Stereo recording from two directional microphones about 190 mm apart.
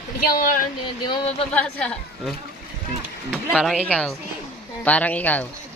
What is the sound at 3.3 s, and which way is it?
Speech, centre (ahead or behind).